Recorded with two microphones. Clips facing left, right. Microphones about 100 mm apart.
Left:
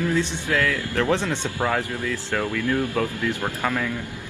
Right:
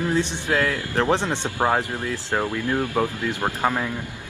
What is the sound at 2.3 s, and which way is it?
Speech, 25° right (ahead or behind).